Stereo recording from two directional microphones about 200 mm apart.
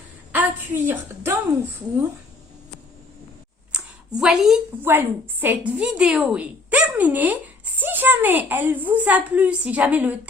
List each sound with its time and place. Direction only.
0.3 s a woman's voice: 10° right (ahead or behind)
3.7 s a woman's voice: 5° right (ahead or behind)